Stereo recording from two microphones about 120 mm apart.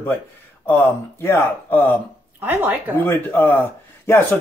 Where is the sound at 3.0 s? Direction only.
20° left (ahead or behind).